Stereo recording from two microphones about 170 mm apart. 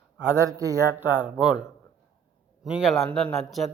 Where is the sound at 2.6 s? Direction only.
5° right (ahead or behind).